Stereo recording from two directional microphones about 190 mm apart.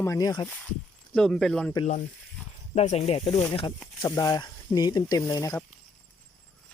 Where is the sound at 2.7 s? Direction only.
35° left (ahead or behind); by 5.6 s 20° left (ahead or behind).